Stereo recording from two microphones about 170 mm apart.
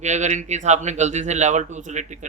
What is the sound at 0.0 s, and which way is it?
A man's voice, 45° right (ahead or behind).